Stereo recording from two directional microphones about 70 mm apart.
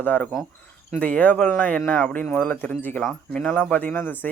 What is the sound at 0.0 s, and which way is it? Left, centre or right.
Speech, left.